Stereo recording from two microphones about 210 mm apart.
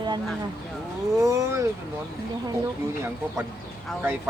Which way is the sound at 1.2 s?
15° right (ahead or behind).